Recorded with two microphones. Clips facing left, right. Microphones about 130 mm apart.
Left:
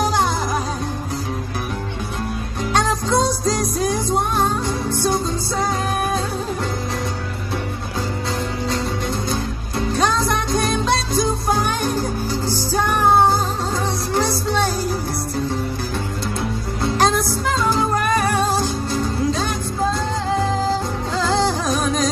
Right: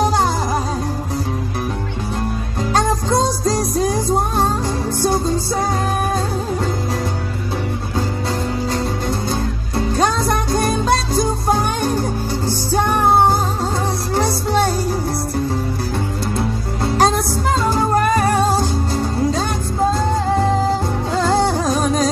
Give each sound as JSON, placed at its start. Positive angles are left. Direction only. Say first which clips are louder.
{"t": 3.1, "sound": "music", "louder": "right 1 dB", "side_deg": -35}
{"t": 9.3, "sound": "music", "louder": "right 3 dB", "side_deg": -30}
{"t": 11.1, "sound": "music", "louder": "right 2 dB", "side_deg": -35}
{"t": 14.1, "sound": "music", "louder": "right 3 dB", "side_deg": -30}
{"t": 16.8, "sound": "music", "louder": "right 2 dB", "side_deg": -30}
{"t": 21.2, "sound": "music", "louder": "right 3 dB", "side_deg": -30}